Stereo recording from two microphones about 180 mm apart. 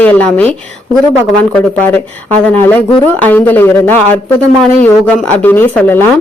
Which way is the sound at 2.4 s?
10° left (ahead or behind).